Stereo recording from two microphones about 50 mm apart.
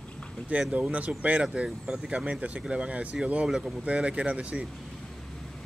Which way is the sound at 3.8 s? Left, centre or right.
Right.